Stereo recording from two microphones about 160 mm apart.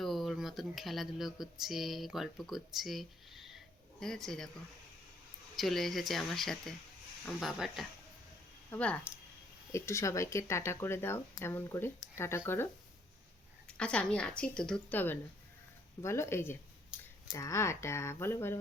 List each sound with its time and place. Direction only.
0.0 s speech: centre (ahead or behind)
5.5 s speech: centre (ahead or behind)
9.7 s speech: 15° left (ahead or behind)
13.7 s speech: 5° left (ahead or behind)